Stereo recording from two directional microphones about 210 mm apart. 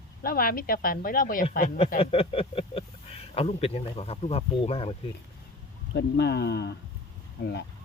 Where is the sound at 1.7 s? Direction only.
30° left (ahead or behind).